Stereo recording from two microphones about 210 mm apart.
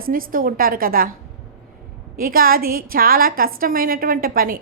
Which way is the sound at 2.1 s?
45° right (ahead or behind).